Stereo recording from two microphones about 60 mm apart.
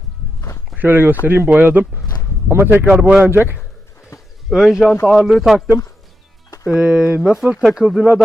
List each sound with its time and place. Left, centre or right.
0.8 s speech: right
2.5 s speech: right
2.9 s speech: centre
3.2 s speech: right
4.4 s speech: centre
6.7 s speech: centre